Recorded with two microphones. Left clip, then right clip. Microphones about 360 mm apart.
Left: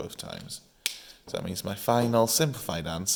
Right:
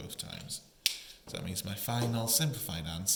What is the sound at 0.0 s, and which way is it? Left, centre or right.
Speech, centre.